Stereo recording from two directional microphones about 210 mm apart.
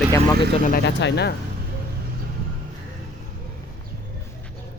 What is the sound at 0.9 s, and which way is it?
Speech, 55° left (ahead or behind).